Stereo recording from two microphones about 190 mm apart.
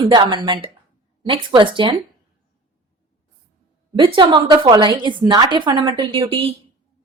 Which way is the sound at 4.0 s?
25° right (ahead or behind).